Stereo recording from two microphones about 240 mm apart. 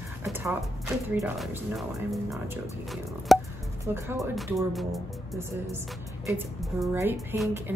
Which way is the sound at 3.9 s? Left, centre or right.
Centre.